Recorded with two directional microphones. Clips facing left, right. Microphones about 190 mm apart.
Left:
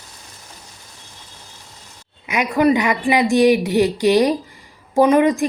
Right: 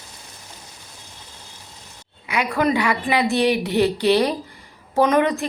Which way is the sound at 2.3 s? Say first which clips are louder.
Left 4 dB; 15° left (ahead or behind).